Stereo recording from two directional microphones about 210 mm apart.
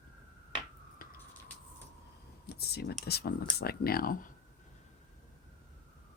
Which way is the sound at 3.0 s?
50° left (ahead or behind).